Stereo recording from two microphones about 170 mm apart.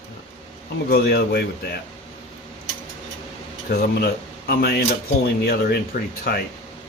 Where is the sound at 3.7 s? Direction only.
65° left (ahead or behind).